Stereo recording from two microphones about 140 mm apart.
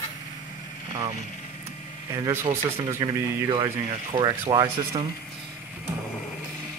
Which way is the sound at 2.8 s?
30° right (ahead or behind).